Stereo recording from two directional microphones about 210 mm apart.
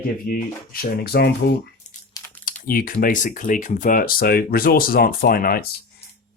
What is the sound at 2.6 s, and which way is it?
Speech, 45° left (ahead or behind).